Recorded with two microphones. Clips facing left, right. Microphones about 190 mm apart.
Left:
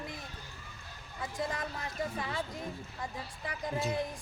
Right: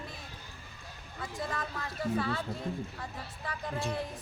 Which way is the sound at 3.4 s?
15° left (ahead or behind).